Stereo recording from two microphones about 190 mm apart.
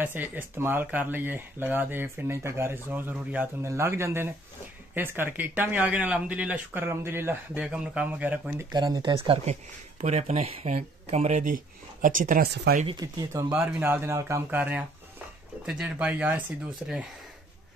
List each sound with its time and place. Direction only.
0.0 s speech: 10° right (ahead or behind)
8.7 s speech: 20° right (ahead or behind); by 12.8 s 50° right (ahead or behind)
12.8 s speech: 20° right (ahead or behind)
13.5 s speech: 10° right (ahead or behind)